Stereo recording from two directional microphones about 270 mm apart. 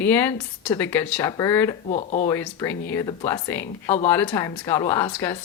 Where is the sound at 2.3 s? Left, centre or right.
Centre.